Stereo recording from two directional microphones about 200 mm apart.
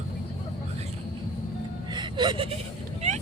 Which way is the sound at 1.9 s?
25° right (ahead or behind).